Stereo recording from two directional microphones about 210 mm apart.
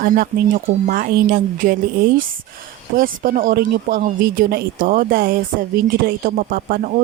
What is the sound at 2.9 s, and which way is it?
Speech, 40° right (ahead or behind).